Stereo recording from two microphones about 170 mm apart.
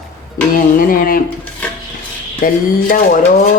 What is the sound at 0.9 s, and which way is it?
Speech, 55° left (ahead or behind).